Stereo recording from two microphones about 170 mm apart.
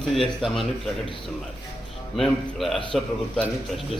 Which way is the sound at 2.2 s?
Centre (ahead or behind).